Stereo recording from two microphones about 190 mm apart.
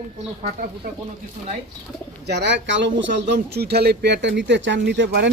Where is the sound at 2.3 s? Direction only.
65° right (ahead or behind).